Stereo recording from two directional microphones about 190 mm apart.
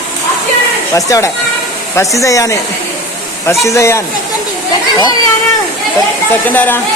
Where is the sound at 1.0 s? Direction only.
15° left (ahead or behind).